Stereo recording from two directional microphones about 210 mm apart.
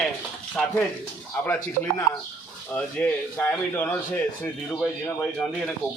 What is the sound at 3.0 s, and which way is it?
Speech, 10° left (ahead or behind).